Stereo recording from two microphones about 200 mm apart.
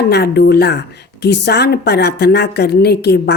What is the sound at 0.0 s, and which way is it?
A woman's voice, 55° left (ahead or behind).